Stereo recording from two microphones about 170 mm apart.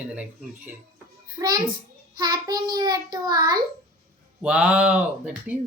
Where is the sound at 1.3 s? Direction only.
25° right (ahead or behind).